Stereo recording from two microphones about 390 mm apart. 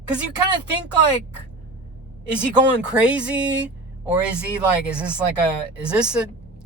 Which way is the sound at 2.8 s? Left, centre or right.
Centre.